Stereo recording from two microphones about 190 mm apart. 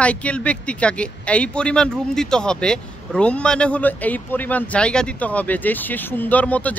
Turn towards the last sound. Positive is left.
turn(degrees=10)  # may be behind; listen again after turning